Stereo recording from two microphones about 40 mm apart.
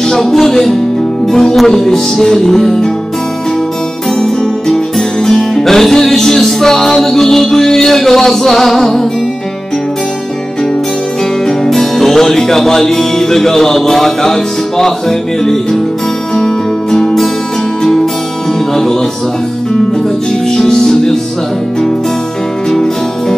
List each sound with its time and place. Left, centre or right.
0.0 s music: centre
4.2 s music: centre
11.4 s music: centre
20.4 s music: centre